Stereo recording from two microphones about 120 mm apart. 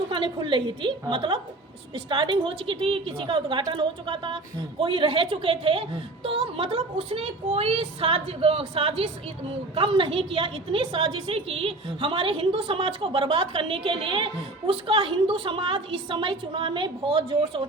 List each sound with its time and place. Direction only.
0.1 s a woman's voice: 45° right (ahead or behind)